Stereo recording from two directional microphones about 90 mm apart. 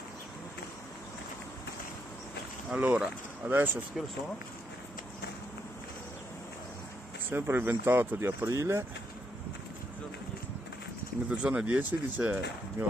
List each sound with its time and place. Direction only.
2.7 s speech: 15° right (ahead or behind)
7.2 s speech: 25° right (ahead or behind)
11.2 s speech: 15° right (ahead or behind)